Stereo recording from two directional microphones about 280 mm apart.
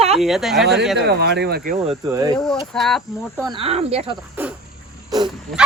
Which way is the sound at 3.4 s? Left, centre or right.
Centre.